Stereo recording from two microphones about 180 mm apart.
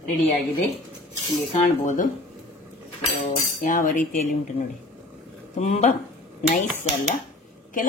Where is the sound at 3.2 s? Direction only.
50° left (ahead or behind).